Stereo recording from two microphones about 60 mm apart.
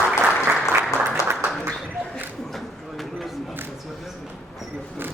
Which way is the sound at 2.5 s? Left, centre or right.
Centre.